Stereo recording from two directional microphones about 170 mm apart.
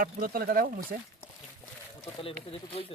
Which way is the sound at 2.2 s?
35° left (ahead or behind).